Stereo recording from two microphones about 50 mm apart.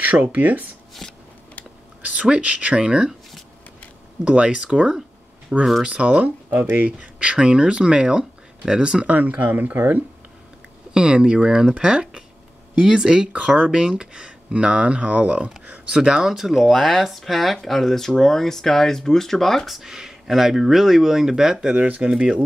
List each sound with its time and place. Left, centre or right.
0.0 s speech: right
2.0 s speech: right
4.2 s speech: right
9.0 s speech: right
10.9 s speech: centre
15.9 s speech: centre
21.7 s speech: right
22.1 s speech: centre